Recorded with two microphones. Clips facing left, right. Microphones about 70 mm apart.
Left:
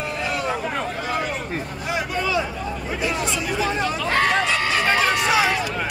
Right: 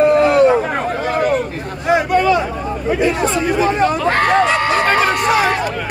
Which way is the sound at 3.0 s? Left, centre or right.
Right.